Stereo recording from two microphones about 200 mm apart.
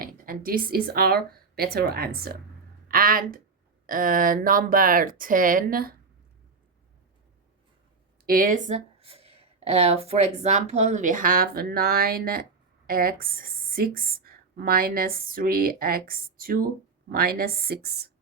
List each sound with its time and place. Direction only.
0.0 s speech: 45° right (ahead or behind)
8.3 s speech: 45° right (ahead or behind)